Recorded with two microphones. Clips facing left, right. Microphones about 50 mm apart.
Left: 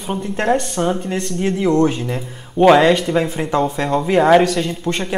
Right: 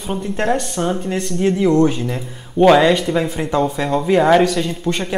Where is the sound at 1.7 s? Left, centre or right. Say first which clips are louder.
Left 1 dB; left.